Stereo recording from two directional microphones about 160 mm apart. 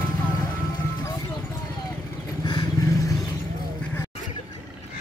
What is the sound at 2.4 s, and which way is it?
Vehicle, 30° left (ahead or behind).